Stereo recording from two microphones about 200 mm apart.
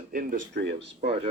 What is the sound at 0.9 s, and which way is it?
Speech, 35° right (ahead or behind).